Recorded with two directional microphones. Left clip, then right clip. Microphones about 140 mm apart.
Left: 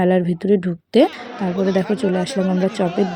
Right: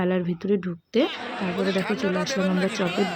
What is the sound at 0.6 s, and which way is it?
Speech, 40° left (ahead or behind).